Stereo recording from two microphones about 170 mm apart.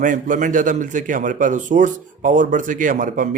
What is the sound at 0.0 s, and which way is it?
A man's voice, 50° right (ahead or behind).